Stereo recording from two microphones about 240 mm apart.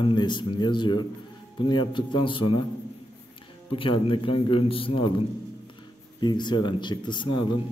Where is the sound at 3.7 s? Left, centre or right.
Left.